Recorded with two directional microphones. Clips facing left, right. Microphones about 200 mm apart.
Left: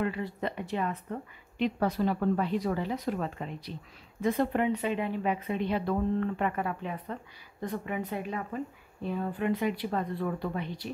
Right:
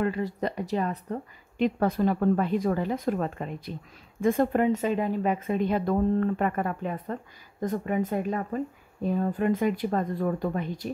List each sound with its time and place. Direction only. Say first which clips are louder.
0.0 s speech: right 4 dB; 40° right (ahead or behind)
1.6 s a woman's voice: right 4 dB; 50° right (ahead or behind)